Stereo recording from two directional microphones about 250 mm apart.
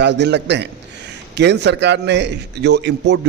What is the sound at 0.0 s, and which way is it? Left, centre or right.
A man's voice, right.